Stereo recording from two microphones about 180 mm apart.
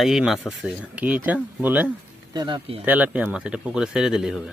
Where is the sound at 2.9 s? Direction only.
10° right (ahead or behind).